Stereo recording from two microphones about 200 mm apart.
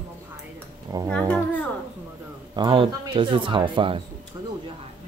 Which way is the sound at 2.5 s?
25° right (ahead or behind).